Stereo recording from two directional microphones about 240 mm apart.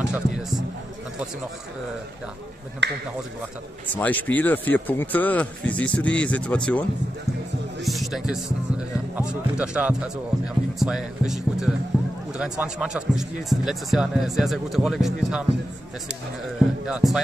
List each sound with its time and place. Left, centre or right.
0.1 s speech: centre
2.8 s speech: right
3.9 s speech: centre
7.8 s speech: centre
16.8 s speech: centre